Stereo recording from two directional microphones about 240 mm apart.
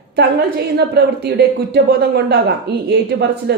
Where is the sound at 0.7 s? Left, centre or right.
Right.